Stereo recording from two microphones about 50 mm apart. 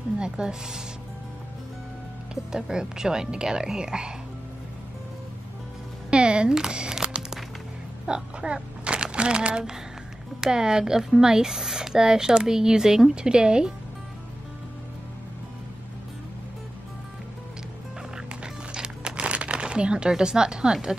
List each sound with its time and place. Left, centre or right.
0.2 s speech: centre
2.5 s speech: centre
6.0 s music: centre
8.1 s speech: right
8.8 s a sound: right
10.4 s speech: centre
18.1 s a sound: centre